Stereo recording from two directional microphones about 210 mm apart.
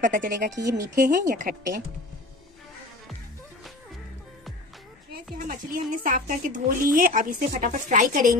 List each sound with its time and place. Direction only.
0.0 s a woman's voice: 40° right (ahead or behind)
0.5 s speech: 15° right (ahead or behind)
0.9 s a woman's voice: 40° right (ahead or behind)
5.1 s a woman's voice: 40° right (ahead or behind)